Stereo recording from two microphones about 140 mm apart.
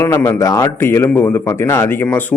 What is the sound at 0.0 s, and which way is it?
A man's voice, 20° left (ahead or behind).